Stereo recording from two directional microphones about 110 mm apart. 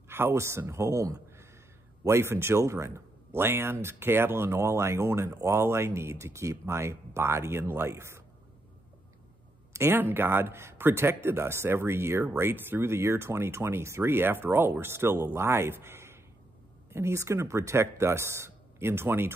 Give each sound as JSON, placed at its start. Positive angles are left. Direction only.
{"t": 0.1, "sound": "a man's voice", "side_deg": -20}
{"t": 9.7, "sound": "speech", "side_deg": -25}